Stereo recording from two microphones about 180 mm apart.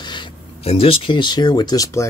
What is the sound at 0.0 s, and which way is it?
Speech, 25° left (ahead or behind).